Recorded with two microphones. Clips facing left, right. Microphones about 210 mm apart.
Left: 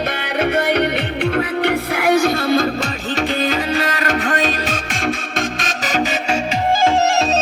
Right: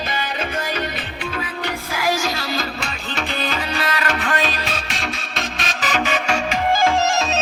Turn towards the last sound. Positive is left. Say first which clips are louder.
# left 4 dB
turn(degrees=35)  # may be behind; listen again after turning